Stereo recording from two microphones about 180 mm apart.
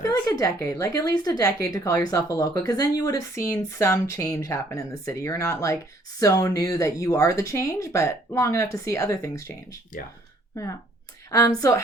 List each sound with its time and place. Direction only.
0.0 s speech: 20° left (ahead or behind)
11.3 s speech: 20° left (ahead or behind)